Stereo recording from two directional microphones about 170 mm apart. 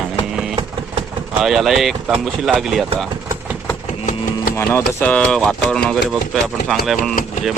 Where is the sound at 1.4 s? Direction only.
Centre (ahead or behind).